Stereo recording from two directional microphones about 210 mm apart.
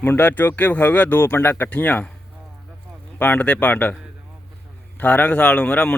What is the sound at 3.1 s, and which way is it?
Speech, 10° left (ahead or behind).